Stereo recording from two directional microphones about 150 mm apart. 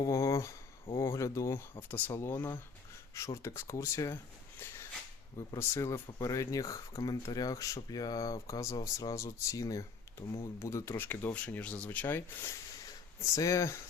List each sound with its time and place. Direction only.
0.0 s speech: 20° left (ahead or behind)
4.6 s a sound: 15° left (ahead or behind)
5.5 s speech: 15° left (ahead or behind)